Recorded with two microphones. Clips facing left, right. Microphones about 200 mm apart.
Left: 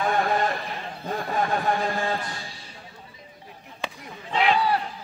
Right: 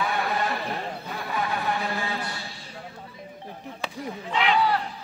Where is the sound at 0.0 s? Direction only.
45° left (ahead or behind).